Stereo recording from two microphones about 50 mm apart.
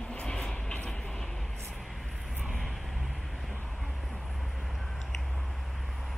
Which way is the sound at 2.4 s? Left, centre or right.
Centre.